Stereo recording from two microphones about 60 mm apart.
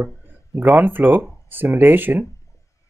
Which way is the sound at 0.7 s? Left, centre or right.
Right.